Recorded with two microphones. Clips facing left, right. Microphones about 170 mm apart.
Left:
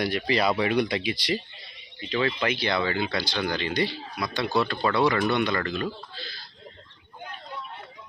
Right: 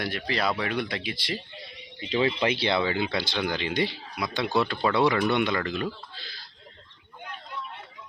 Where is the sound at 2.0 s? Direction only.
25° right (ahead or behind).